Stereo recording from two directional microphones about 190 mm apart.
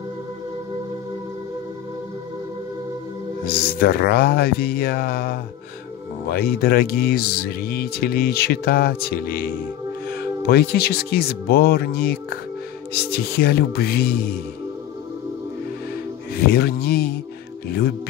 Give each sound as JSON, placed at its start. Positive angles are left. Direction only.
{"t": 3.6, "sound": "speech", "side_deg": 55}
{"t": 10.4, "sound": "speech", "side_deg": 55}
{"t": 16.3, "sound": "speech", "side_deg": 55}